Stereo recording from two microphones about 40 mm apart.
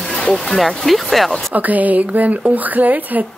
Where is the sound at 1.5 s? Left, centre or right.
Right.